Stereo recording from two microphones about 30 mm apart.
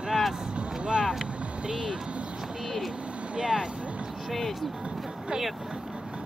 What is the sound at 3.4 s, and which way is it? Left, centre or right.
Music, right.